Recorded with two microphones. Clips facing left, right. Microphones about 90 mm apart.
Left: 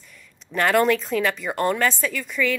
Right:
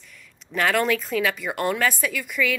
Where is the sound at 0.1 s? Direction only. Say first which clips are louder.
Left 1 dB; centre (ahead or behind).